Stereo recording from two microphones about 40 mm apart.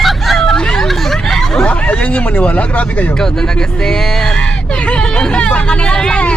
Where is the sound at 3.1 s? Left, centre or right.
Centre.